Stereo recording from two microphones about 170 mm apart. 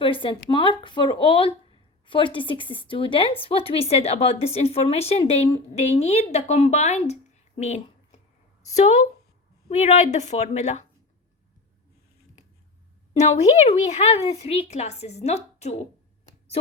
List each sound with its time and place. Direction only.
0.0 s speech: 30° left (ahead or behind)
13.1 s speech: 40° left (ahead or behind)